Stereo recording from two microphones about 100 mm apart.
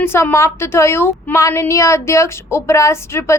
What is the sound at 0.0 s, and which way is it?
A woman's voice, 25° left (ahead or behind).